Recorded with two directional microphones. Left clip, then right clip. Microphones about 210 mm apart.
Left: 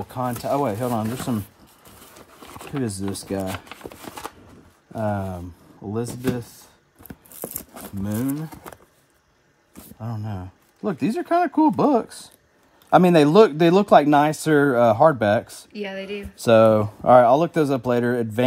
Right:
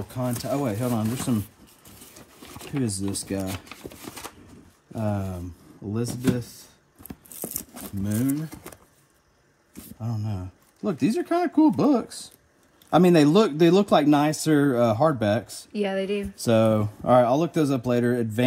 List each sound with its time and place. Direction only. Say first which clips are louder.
0.1 s speech: left 4 dB; 30° left (ahead or behind)
2.4 s a sound: left 2 dB; 15° left (ahead or behind)
2.8 s speech: left 1 dB; 30° left (ahead or behind)
3.4 s a sound: left 4 dB; 20° left (ahead or behind)
4.9 s speech: left 4 dB; 30° left (ahead or behind)
7.1 s a sound: left 2 dB; 10° left (ahead or behind)
8.0 s speech: even; 30° left (ahead or behind)
9.9 s speech: left 2 dB; 25° left (ahead or behind)
15.7 s speech: right 4 dB; 20° right (ahead or behind)
16.3 s speech: left 7 dB; 35° left (ahead or behind)